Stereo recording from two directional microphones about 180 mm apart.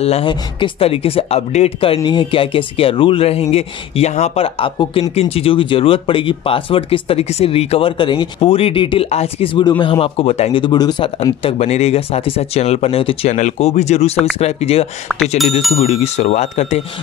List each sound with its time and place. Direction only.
0.0 s speech: 30° left (ahead or behind)